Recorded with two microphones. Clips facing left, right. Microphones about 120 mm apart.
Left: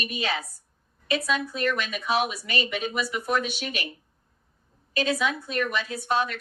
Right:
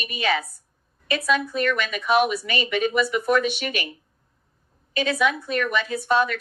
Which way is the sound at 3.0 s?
60° right (ahead or behind).